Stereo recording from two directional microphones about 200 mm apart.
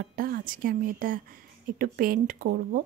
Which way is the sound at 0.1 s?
45° right (ahead or behind).